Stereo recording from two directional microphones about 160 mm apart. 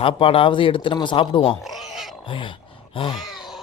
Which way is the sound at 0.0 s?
35° left (ahead or behind).